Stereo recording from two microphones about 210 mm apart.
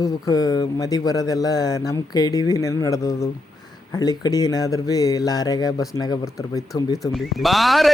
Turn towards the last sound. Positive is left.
turn(degrees=0)  # may be behind; listen again after turning